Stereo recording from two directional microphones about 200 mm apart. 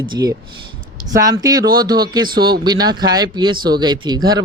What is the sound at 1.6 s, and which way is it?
Speech, 50° right (ahead or behind).